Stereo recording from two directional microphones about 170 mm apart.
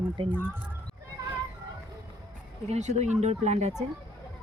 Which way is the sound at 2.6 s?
40° right (ahead or behind).